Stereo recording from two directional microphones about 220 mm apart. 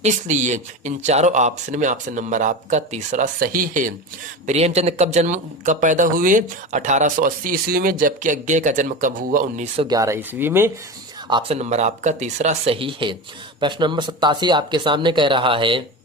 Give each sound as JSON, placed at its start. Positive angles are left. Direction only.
{"t": 0.0, "sound": "speech", "side_deg": -35}
{"t": 9.8, "sound": "speech", "side_deg": -15}
{"t": 11.3, "sound": "speech", "side_deg": -25}